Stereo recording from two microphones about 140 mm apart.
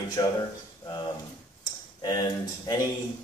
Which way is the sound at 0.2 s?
30° left (ahead or behind).